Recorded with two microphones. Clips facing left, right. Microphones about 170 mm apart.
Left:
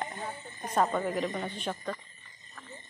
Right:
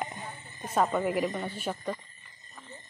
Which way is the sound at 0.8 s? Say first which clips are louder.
Right 2 dB; 10° right (ahead or behind).